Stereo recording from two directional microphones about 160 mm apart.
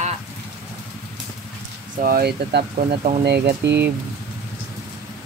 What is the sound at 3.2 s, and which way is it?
Speech, 90° right.